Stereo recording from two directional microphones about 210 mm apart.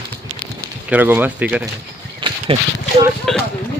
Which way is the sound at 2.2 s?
20° right (ahead or behind).